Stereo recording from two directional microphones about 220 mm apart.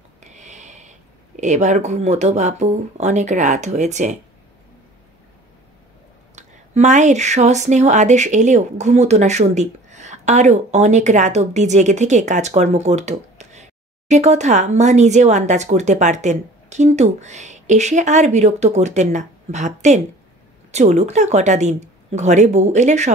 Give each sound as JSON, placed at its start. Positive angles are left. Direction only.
{"t": 0.2, "sound": "speech", "side_deg": -35}
{"t": 6.3, "sound": "speech", "side_deg": -30}